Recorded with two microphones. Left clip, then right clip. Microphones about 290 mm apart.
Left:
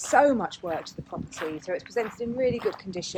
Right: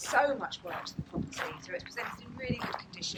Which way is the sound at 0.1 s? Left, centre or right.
Centre.